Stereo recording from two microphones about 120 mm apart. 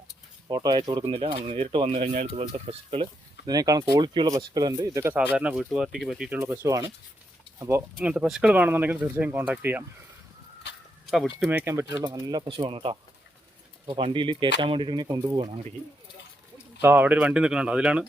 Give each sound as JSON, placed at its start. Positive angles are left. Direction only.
{"t": 0.4, "sound": "speech", "side_deg": -35}
{"t": 2.0, "sound": "speech", "side_deg": -90}
{"t": 2.3, "sound": "speech", "side_deg": -50}
{"t": 3.4, "sound": "speech", "side_deg": -30}
{"t": 5.4, "sound": "speech", "side_deg": -10}
{"t": 6.3, "sound": "speech", "side_deg": -15}
{"t": 8.0, "sound": "speech", "side_deg": -10}
{"t": 11.0, "sound": "a sound", "side_deg": 0}
{"t": 11.3, "sound": "speech", "side_deg": -5}
{"t": 11.6, "sound": "speech", "side_deg": -25}
{"t": 12.0, "sound": "speech", "side_deg": -35}
{"t": 16.8, "sound": "speech", "side_deg": -15}